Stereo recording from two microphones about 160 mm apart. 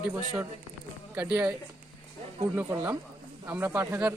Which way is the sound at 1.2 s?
10° right (ahead or behind).